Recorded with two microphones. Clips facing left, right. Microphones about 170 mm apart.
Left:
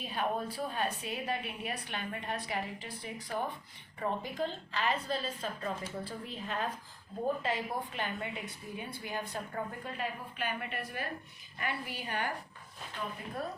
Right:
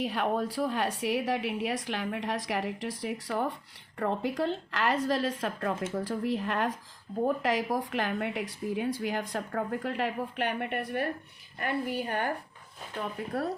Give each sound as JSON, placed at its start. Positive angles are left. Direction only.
{"t": 0.0, "sound": "a woman's voice", "side_deg": -80}
{"t": 6.0, "sound": "a woman's voice", "side_deg": -90}
{"t": 7.4, "sound": "a woman's voice", "side_deg": -90}
{"t": 11.6, "sound": "a woman's voice", "side_deg": -50}
{"t": 13.0, "sound": "a woman's voice", "side_deg": -75}